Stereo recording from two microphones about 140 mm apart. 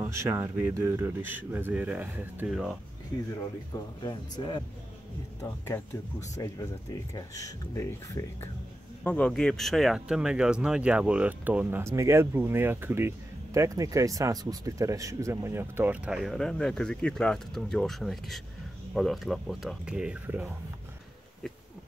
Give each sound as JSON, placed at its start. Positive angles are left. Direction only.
{"t": 0.0, "sound": "speech", "side_deg": -20}
{"t": 3.7, "sound": "speech", "side_deg": 30}
{"t": 5.7, "sound": "speech", "side_deg": 15}
{"t": 6.4, "sound": "speech", "side_deg": 25}
{"t": 9.0, "sound": "speech", "side_deg": 10}